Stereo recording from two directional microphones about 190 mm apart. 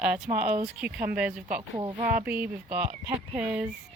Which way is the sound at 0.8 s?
5° right (ahead or behind).